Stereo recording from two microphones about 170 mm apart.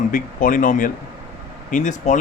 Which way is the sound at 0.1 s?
50° left (ahead or behind).